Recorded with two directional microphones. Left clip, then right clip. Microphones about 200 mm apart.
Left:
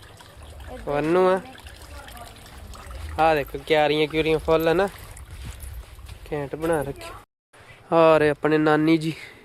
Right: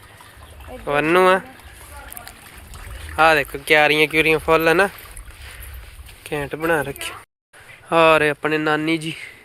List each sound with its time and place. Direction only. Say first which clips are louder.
0.9 s speech: right 5 dB; 5° right (ahead or behind)
3.2 s speech: right 5 dB; centre (ahead or behind)
6.2 s speech: right 4 dB; centre (ahead or behind)
7.9 s speech: right 2 dB; 15° left (ahead or behind); by 9.3 s 30° left (ahead or behind)